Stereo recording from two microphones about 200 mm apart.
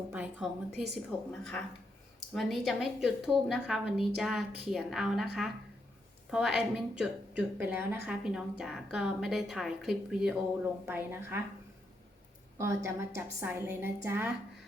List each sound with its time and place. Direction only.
0.1 s a woman's voice: 5° right (ahead or behind)
1.3 s a woman's voice: 5° left (ahead or behind); by 11.3 s 10° right (ahead or behind)
12.5 s a woman's voice: 15° right (ahead or behind)